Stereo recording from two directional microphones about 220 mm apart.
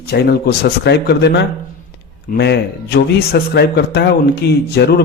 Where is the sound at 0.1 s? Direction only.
45° left (ahead or behind).